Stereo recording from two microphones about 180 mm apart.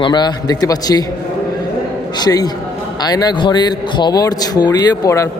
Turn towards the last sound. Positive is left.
turn(degrees=20)  # may be behind; listen again after turning